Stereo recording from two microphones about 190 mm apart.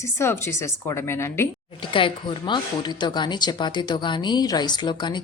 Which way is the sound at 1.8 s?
25° left (ahead or behind).